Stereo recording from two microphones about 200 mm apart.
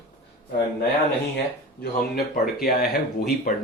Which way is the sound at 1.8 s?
50° left (ahead or behind).